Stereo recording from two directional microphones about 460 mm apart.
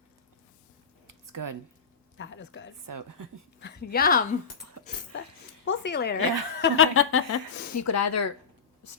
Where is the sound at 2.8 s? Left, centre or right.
Right.